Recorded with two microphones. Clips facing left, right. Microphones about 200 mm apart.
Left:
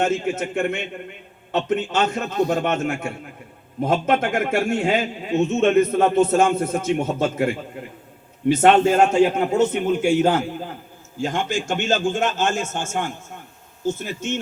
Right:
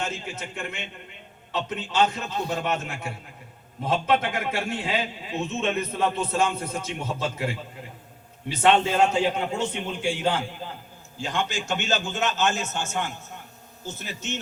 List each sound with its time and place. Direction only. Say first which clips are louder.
0.0 s a man's voice: left 11 dB; 50° left (ahead or behind)